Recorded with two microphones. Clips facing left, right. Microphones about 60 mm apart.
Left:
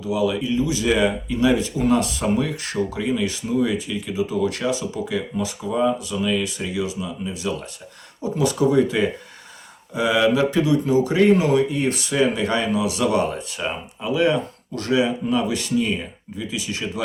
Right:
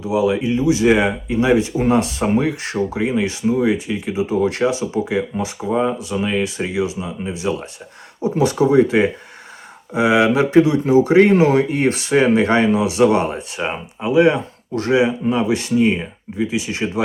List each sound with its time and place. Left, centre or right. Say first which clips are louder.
0.0 s speech: right 4 dB; right